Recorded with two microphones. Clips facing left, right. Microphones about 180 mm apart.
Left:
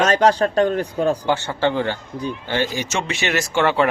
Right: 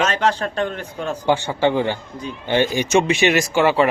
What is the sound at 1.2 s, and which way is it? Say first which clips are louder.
Speech: right 2 dB; 15° right (ahead or behind).